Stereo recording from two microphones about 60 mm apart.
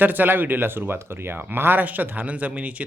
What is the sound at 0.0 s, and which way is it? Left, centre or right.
Speech, right.